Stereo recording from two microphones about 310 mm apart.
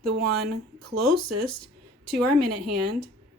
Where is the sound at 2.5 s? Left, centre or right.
Right.